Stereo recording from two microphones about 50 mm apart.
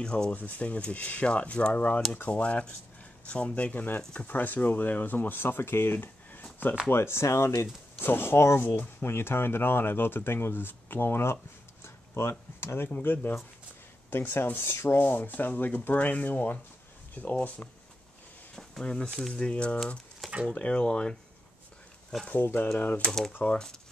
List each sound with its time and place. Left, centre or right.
0.0 s speech: centre
4.3 s speech: left
6.9 s speech: left
8.0 s speech: left
13.0 s speech: left
18.6 s a sound: centre
19.3 s speech: left
20.2 s a sound: centre
20.5 s speech: left
22.4 s speech: left
22.8 s speech: left
23.4 s speech: left